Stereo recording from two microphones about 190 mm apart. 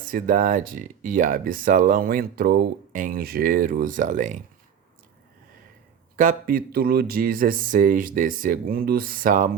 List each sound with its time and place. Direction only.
0.1 s speech: 45° right (ahead or behind)
6.1 s speech: 45° right (ahead or behind)